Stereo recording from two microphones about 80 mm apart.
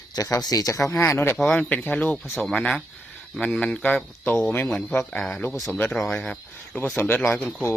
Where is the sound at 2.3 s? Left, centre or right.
Centre.